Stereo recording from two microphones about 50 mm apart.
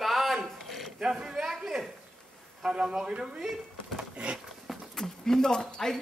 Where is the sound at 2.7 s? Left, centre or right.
Centre.